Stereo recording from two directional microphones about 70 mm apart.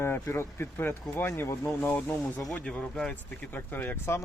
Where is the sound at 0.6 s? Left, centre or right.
Left.